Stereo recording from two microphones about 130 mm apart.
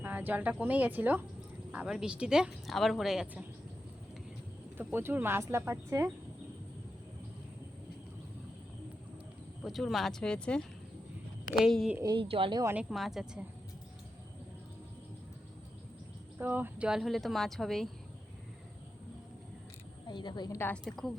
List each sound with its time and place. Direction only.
0.0 s a woman's voice: 15° right (ahead or behind)
4.8 s speech: 15° right (ahead or behind)
9.6 s a woman's voice: centre (ahead or behind)
12.0 s speech: 40° right (ahead or behind)
12.7 s a woman's voice: centre (ahead or behind)
16.4 s a woman's voice: 15° right (ahead or behind); by 17.8 s centre (ahead or behind)
20.1 s a woman's voice: 35° left (ahead or behind)
20.6 s a woman's voice: 10° left (ahead or behind)